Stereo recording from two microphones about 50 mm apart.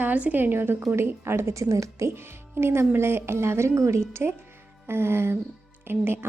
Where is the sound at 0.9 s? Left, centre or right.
Right.